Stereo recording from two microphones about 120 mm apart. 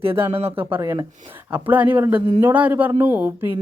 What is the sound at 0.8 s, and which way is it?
Speech, 30° right (ahead or behind).